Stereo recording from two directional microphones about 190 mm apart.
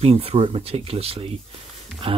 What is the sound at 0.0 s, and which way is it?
Speech, 30° right (ahead or behind).